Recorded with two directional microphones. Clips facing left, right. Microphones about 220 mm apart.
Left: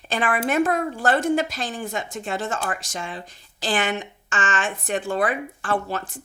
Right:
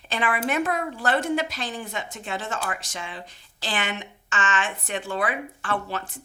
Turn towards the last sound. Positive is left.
turn(degrees=45)  # may be behind; listen again after turning